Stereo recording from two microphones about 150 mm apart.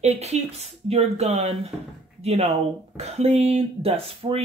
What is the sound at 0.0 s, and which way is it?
Speech, 45° right (ahead or behind).